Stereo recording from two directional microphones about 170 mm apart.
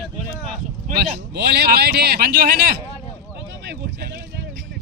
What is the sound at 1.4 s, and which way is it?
Speech, 70° right (ahead or behind).